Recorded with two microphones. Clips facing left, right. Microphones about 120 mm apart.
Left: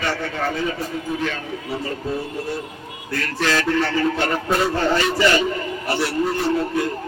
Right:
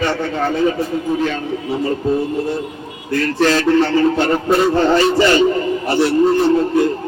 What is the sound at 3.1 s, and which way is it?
A man's voice, 30° right (ahead or behind).